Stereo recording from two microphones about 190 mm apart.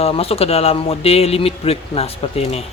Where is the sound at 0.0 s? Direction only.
30° left (ahead or behind).